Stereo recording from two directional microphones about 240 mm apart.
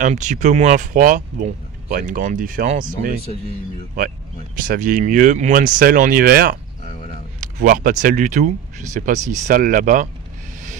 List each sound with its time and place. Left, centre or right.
0.0 s speech: right
4.6 s speech: right